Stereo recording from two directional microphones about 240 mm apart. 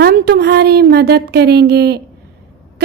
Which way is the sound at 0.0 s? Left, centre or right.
Right.